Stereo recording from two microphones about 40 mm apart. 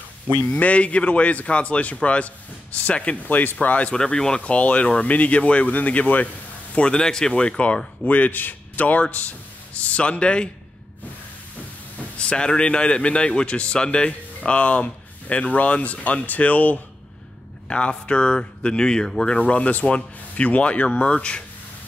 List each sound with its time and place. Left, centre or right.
0.5 s speech: left
3.3 s speech: left
3.9 s speech: centre
4.5 s speech: left
6.7 s a man's voice: left
7.0 s speech: centre
8.1 s a man's voice: left
9.8 s speech: left
12.2 s speech: left
17.6 s speech: left